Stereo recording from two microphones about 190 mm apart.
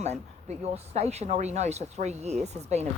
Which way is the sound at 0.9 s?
35° right (ahead or behind).